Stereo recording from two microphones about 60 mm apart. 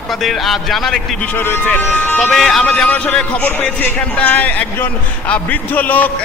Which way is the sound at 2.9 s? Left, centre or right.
Left.